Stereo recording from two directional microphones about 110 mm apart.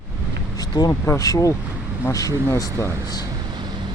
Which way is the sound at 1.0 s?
25° left (ahead or behind).